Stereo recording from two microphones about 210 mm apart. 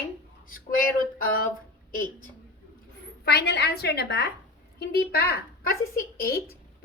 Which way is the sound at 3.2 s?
50° left (ahead or behind).